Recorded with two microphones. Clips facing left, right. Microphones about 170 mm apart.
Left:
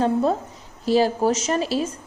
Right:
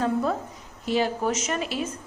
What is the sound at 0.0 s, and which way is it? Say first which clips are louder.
A woman's voice: left 4 dB; 30° left (ahead or behind).